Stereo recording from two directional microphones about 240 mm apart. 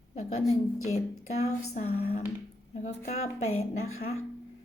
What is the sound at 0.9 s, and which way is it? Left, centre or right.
Speech, left.